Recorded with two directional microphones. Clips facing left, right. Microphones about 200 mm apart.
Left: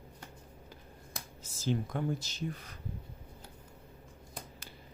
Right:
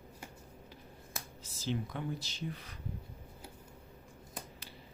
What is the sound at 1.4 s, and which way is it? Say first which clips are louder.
Speech: left 4 dB; 45° left (ahead or behind).